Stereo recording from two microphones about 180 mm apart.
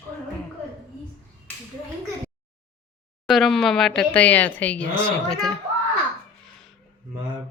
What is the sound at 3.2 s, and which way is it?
Speech, centre (ahead or behind).